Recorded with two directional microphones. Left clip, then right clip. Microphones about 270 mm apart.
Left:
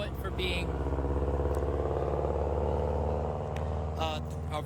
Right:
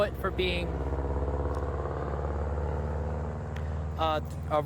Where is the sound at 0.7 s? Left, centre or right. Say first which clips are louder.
Left 1 dB; left.